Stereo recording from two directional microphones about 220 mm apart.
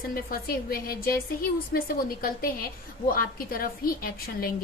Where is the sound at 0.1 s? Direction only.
40° left (ahead or behind).